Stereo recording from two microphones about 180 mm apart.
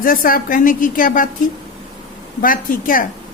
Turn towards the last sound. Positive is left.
turn(degrees=50)  # may be behind; listen again after turning